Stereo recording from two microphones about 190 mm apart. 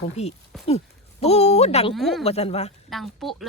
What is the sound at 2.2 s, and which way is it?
Speech, 30° left (ahead or behind).